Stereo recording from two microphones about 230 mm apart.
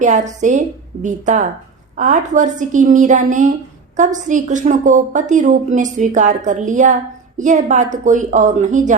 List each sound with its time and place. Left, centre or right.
0.0 s a woman's voice: right